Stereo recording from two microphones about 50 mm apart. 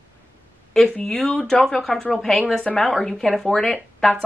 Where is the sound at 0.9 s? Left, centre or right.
Centre.